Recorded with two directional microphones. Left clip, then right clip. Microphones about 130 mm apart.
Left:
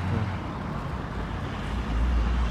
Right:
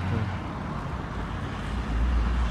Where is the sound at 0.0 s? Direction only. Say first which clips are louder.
Even; 15° left (ahead or behind).